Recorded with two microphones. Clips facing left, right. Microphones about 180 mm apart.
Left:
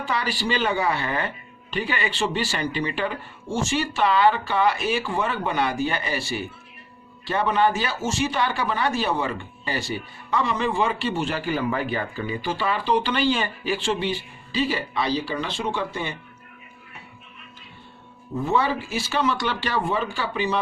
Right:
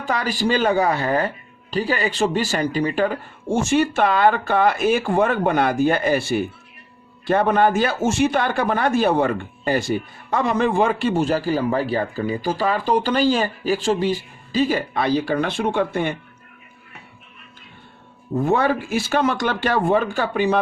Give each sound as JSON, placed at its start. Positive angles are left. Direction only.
{"t": 0.0, "sound": "speech", "side_deg": -45}
{"t": 18.4, "sound": "speech", "side_deg": -50}